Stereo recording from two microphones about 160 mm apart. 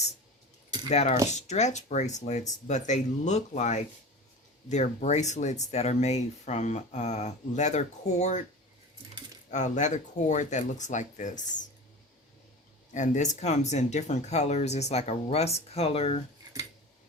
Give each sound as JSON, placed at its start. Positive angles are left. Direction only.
{"t": 0.9, "sound": "speech", "side_deg": 45}
{"t": 9.5, "sound": "speech", "side_deg": 50}
{"t": 12.9, "sound": "speech", "side_deg": 50}